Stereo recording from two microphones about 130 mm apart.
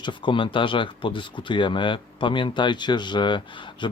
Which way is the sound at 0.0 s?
40° left (ahead or behind).